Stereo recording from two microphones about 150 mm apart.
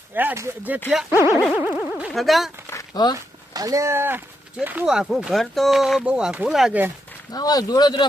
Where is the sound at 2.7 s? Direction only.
25° left (ahead or behind).